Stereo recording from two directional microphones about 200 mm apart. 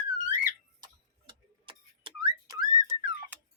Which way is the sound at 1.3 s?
25° right (ahead or behind).